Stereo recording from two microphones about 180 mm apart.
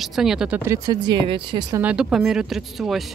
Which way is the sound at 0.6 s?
20° right (ahead or behind).